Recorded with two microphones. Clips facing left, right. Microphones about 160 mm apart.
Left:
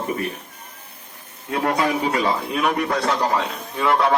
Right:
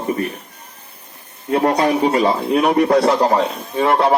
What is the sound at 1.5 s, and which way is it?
A man's voice, 35° right (ahead or behind).